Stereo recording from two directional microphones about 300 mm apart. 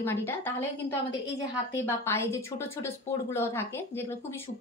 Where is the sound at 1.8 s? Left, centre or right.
Centre.